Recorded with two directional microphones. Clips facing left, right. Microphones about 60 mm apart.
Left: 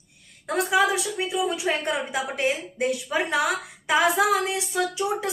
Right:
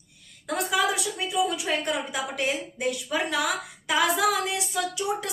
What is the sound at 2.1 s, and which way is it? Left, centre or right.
A woman's voice, left.